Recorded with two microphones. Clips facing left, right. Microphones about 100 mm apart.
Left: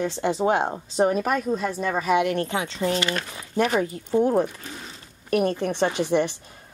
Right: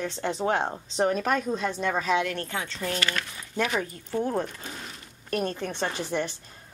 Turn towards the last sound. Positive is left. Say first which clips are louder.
# left 7 dB
turn(degrees=15)  # may be behind; listen again after turning